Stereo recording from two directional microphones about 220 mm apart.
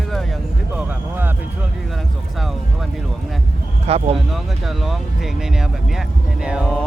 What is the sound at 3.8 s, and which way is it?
Speech, 30° right (ahead or behind).